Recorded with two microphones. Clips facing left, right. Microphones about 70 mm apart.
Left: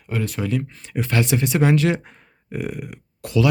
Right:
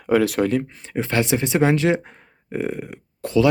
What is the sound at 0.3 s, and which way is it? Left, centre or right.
Speech, right.